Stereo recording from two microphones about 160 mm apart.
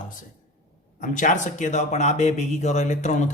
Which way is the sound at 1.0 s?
50° left (ahead or behind).